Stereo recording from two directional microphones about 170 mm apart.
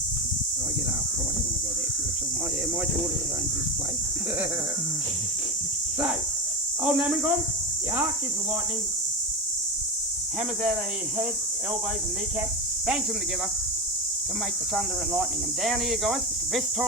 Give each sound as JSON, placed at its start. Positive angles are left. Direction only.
{"t": 6.8, "sound": "speech", "side_deg": -5}
{"t": 14.8, "sound": "speech", "side_deg": 0}